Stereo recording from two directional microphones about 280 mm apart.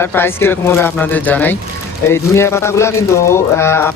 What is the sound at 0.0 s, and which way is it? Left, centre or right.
Speech, centre.